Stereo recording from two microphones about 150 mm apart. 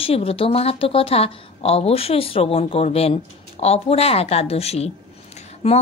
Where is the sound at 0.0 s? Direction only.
40° left (ahead or behind).